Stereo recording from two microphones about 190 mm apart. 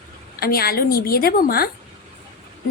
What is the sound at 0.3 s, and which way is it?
Speech, 55° left (ahead or behind).